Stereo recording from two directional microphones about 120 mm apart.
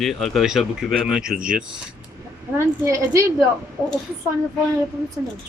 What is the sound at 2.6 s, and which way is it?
Speech, 25° right (ahead or behind).